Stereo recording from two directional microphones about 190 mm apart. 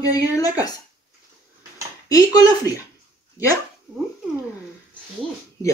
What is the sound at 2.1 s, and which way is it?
Speech, 20° left (ahead or behind).